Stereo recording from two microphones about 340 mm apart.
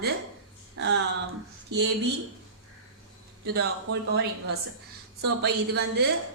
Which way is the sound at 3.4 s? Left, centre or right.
Right.